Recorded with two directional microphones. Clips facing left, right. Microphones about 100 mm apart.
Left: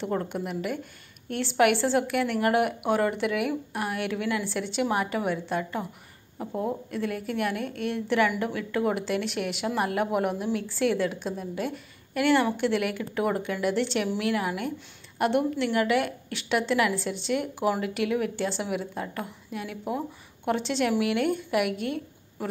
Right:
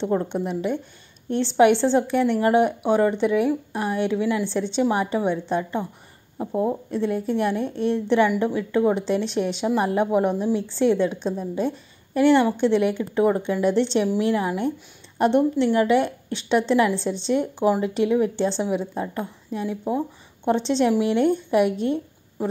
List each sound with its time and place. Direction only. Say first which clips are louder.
0.0 s a woman's voice: right 6 dB; 25° right (ahead or behind)